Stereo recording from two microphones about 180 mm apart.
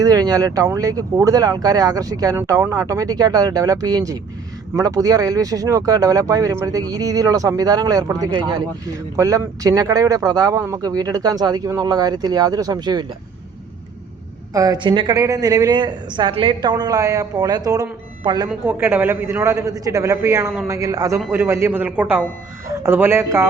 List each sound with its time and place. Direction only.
0.0 s speech: 20° right (ahead or behind)
14.5 s speech: 20° right (ahead or behind)
18.4 s a man's voice: 10° right (ahead or behind)